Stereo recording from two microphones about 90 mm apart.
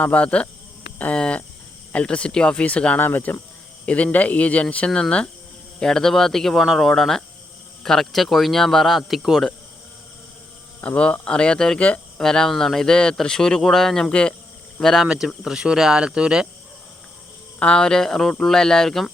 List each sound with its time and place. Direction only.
0.0 s speech: 15° left (ahead or behind); by 9.5 s centre (ahead or behind)
10.8 s speech: 15° left (ahead or behind)
15.0 s speech: 10° right (ahead or behind)
17.6 s speech: 10° left (ahead or behind)